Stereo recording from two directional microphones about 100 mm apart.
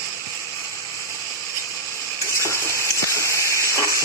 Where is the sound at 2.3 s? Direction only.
30° left (ahead or behind).